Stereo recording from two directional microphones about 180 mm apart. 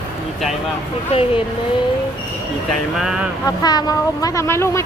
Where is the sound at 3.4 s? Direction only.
20° left (ahead or behind).